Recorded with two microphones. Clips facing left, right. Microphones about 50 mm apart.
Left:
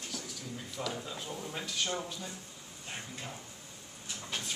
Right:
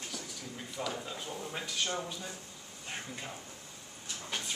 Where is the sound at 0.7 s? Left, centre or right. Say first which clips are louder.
Right 1 dB; centre.